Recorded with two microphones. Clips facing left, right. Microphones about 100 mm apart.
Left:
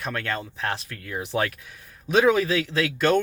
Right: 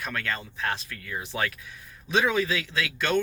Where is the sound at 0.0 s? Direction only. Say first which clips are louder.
Left 3 dB; 35° left (ahead or behind).